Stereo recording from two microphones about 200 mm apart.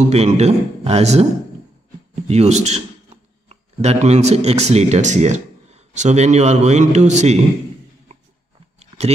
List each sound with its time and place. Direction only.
0.1 s speech: 30° right (ahead or behind)
2.2 s speech: 35° right (ahead or behind)
8.7 s a sound: 30° right (ahead or behind)